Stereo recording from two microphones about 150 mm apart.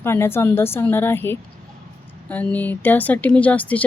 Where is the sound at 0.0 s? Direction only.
15° left (ahead or behind).